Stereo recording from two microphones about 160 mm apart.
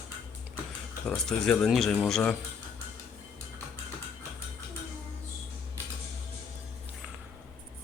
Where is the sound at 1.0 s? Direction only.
5° left (ahead or behind).